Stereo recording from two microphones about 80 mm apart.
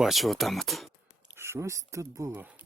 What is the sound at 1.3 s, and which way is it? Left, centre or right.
Speech, right.